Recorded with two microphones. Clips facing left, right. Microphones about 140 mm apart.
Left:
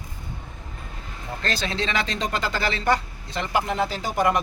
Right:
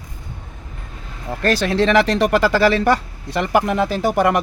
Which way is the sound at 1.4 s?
65° right (ahead or behind).